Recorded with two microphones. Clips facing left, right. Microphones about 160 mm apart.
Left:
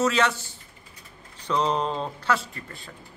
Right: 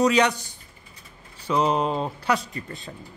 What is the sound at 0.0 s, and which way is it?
A man's voice, 15° right (ahead or behind).